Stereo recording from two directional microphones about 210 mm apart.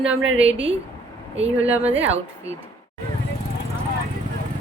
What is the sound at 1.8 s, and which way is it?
Speech, 10° right (ahead or behind).